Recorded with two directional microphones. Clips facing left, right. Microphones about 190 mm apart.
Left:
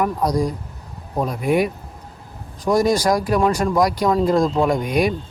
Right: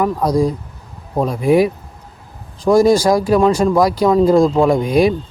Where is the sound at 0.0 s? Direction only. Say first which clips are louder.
Right 4 dB; 25° right (ahead or behind).